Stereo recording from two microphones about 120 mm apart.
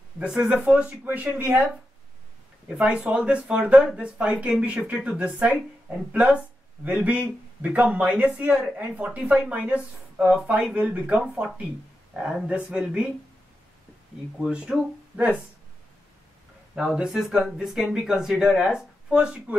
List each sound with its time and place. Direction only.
0.2 s a woman's voice: 10° right (ahead or behind)
2.8 s a woman's voice: 10° right (ahead or behind)
14.4 s a woman's voice: 5° right (ahead or behind)
16.7 s speech: 5° right (ahead or behind)